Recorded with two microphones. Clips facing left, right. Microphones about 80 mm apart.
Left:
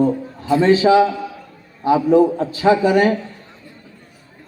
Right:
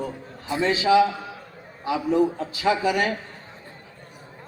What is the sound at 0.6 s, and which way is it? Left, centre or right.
A man's voice, left.